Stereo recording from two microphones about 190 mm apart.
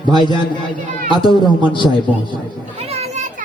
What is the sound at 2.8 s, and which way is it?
Children playing, 35° right (ahead or behind).